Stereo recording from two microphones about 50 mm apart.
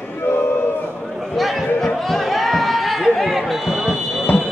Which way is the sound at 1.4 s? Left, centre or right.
Centre.